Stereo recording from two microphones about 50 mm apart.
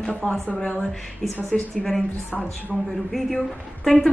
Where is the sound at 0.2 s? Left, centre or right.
Centre.